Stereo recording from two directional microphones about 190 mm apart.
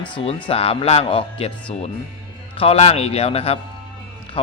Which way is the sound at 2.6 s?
35° left (ahead or behind).